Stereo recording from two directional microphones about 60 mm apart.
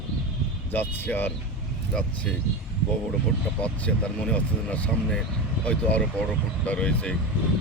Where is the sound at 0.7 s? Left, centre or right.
Left.